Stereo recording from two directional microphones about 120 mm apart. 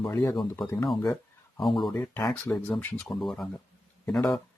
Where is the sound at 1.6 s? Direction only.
Centre (ahead or behind).